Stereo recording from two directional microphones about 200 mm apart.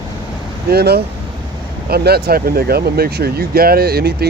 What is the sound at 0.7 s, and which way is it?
Speech, 55° right (ahead or behind).